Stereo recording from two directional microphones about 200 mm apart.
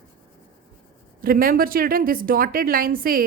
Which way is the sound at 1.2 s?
45° right (ahead or behind).